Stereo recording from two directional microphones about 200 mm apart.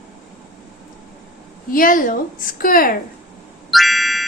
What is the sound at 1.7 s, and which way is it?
A woman's voice, 45° left (ahead or behind).